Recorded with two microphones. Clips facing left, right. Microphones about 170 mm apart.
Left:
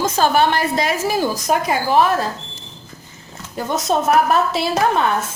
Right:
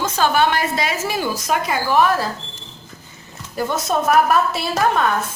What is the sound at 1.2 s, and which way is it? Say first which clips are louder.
Speech: left 3 dB; 20° left (ahead or behind).